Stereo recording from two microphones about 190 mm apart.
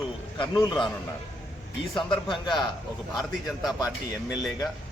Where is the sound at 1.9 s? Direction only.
Centre (ahead or behind).